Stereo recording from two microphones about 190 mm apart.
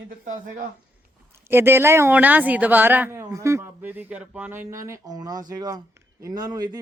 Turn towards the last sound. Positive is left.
turn(degrees=-20)  # may be behind; listen again after turning